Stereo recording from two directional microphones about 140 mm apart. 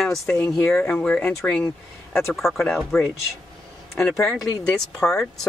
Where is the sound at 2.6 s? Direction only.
10° left (ahead or behind).